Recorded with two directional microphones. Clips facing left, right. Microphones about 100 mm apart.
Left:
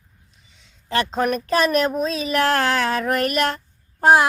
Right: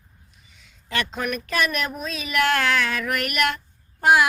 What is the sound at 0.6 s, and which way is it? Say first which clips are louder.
Speech: left 5 dB; 30° left (ahead or behind).